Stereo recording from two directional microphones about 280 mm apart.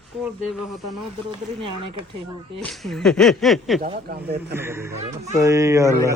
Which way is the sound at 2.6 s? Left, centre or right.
Centre.